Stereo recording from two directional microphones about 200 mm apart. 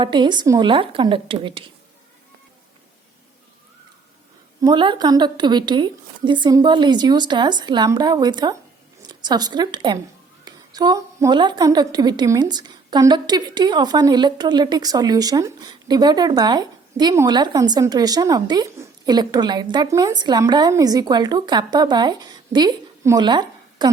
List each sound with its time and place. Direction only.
0.0 s a woman's voice: 25° right (ahead or behind)
4.6 s a woman's voice: 20° right (ahead or behind)